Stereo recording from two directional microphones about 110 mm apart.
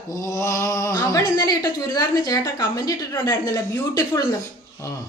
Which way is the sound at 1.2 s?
40° left (ahead or behind).